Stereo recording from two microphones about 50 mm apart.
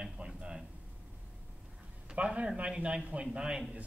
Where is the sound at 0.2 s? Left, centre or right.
Right.